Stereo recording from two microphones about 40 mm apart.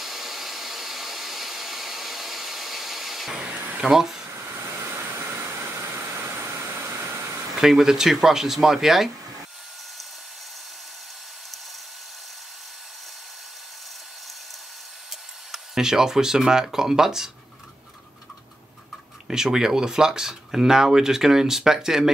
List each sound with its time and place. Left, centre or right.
0.0 s hair dryer: centre
3.8 s speech: centre
4.6 s vehicle: right
5.8 s a sound: right
6.2 s vehicle: right
7.6 s speech: centre
15.0 s speech: centre
19.2 s speech: centre